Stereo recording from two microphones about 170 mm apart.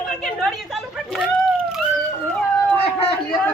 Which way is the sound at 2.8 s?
35° left (ahead or behind).